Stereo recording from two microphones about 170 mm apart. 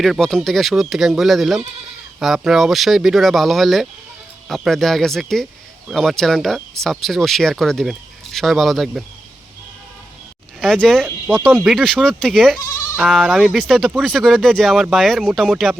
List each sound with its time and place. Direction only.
0.0 s speech: centre (ahead or behind)
10.6 s speech: centre (ahead or behind)
12.6 s bleat: 20° left (ahead or behind)
13.0 s speech: centre (ahead or behind)